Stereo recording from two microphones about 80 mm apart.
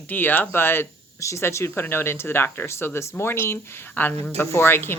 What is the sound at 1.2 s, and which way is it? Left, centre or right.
Speech, left.